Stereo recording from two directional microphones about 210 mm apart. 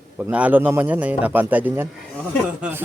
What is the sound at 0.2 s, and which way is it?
A man's voice, 5° right (ahead or behind).